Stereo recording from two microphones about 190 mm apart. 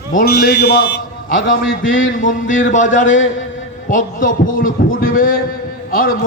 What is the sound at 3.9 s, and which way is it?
A man's voice, 45° left (ahead or behind).